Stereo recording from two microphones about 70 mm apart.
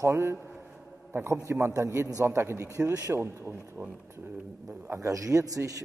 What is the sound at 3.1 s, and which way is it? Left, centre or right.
Speech, right.